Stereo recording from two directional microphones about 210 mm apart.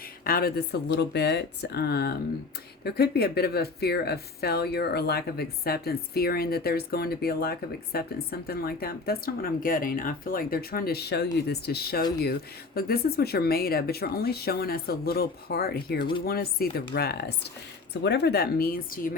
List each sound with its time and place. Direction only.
0.3 s speech: 45° left (ahead or behind)